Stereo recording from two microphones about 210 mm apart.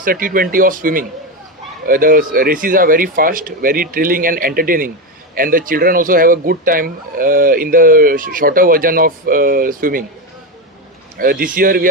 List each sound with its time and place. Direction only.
0.0 s speech: 40° right (ahead or behind)
11.1 s speech: 45° right (ahead or behind)